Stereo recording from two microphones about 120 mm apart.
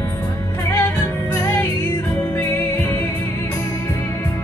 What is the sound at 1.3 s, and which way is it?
Music, 20° left (ahead or behind).